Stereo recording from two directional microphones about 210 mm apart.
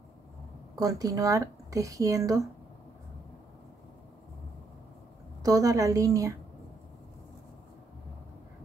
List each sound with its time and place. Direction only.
0.7 s speech: 15° right (ahead or behind)
5.4 s speech: 15° right (ahead or behind)